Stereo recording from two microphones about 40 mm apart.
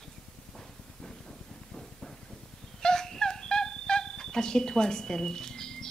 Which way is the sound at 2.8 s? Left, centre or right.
Centre.